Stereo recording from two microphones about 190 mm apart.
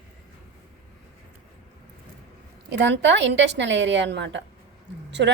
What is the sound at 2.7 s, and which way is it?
A woman's voice, 65° right (ahead or behind).